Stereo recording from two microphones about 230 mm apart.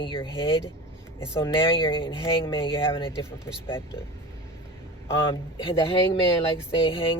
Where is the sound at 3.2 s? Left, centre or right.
Centre.